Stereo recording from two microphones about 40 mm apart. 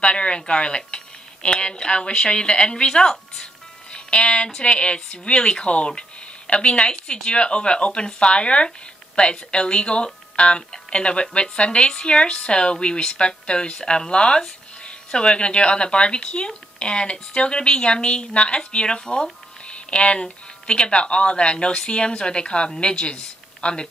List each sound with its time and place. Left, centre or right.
0.0 s a woman's voice: left
3.9 s music: left
4.6 s speech: left